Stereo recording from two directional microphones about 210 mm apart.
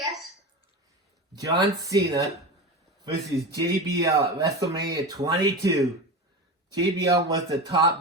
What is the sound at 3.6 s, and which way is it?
Speech, 15° right (ahead or behind).